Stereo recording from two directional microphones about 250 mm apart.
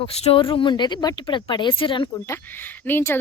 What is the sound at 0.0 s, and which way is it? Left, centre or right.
Speech, left.